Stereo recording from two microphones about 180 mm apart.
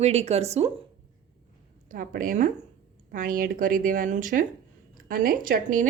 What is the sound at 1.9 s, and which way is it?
Speech, 50° right (ahead or behind).